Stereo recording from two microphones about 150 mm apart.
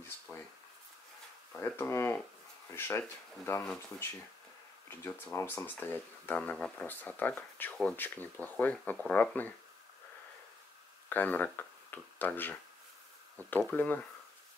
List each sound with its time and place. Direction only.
0.3 s a sound: 15° left (ahead or behind)
1.6 s speech: 15° left (ahead or behind)
4.8 s speech: 15° left (ahead or behind)
11.1 s speech: 10° left (ahead or behind)